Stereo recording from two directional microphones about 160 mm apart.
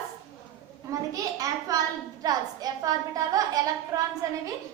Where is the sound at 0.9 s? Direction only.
20° right (ahead or behind).